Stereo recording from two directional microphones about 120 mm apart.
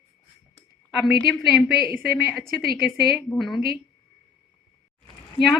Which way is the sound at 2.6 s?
Centre (ahead or behind).